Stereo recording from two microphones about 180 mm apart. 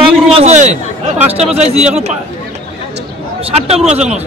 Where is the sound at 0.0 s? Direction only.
35° right (ahead or behind).